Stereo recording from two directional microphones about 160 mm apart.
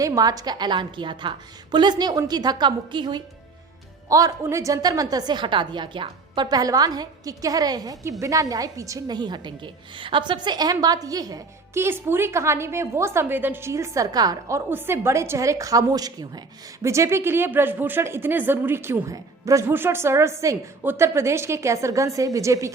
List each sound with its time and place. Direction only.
0.0 s a woman's voice: 20° right (ahead or behind)